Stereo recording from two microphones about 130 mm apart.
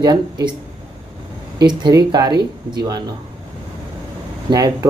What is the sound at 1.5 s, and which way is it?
Speech, 30° right (ahead or behind).